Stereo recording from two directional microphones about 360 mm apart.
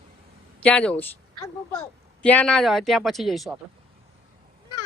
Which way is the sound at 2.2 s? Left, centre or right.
Centre.